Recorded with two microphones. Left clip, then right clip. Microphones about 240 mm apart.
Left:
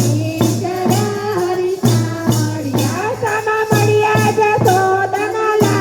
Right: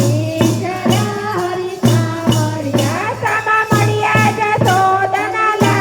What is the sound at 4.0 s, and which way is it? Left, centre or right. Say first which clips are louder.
Music: left 1 dB; right.